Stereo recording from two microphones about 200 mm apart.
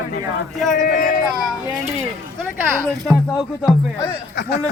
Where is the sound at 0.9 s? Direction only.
50° left (ahead or behind).